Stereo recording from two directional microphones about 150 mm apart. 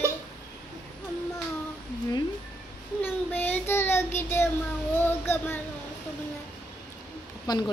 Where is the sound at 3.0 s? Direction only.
15° left (ahead or behind).